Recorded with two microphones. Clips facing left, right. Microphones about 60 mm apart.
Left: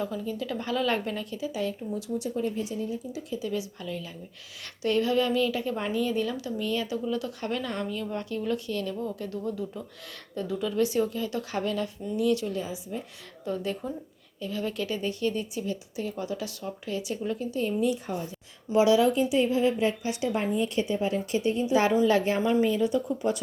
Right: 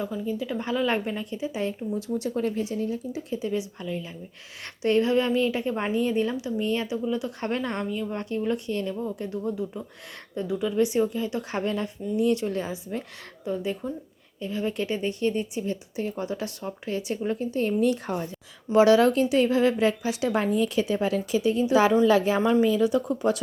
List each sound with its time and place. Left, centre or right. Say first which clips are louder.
0.0 s a woman's voice: right 2 dB; centre; by 1.7 s right
2.0 s speech: right 3 dB; right
3.1 s a woman's voice: right 3 dB; right; by 7.3 s centre
7.4 s a woman's voice: right 3 dB; right
12.5 s speech: right 3 dB; right
13.4 s a woman's voice: right 2 dB; centre
14.4 s a woman's voice: right 3 dB; right